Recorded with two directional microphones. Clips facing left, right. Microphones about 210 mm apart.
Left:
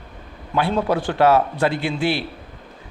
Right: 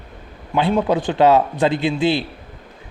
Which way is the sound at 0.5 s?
20° right (ahead or behind).